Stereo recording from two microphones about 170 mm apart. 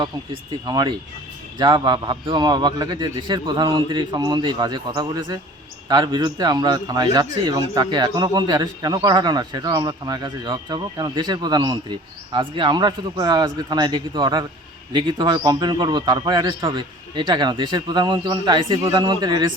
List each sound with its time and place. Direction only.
0.6 s a man's voice: 25° right (ahead or behind)